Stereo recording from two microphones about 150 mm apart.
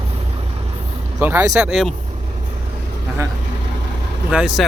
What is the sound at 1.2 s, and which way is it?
Speech, 15° right (ahead or behind).